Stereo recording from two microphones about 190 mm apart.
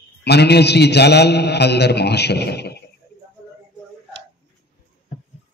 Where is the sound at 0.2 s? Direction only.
60° left (ahead or behind).